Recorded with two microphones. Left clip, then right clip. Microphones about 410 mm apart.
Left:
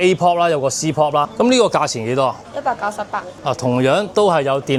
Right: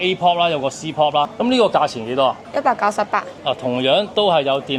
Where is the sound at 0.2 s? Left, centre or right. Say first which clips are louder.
Left 1 dB; left.